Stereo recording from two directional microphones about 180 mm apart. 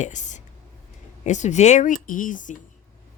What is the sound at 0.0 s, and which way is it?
Speech, 40° left (ahead or behind).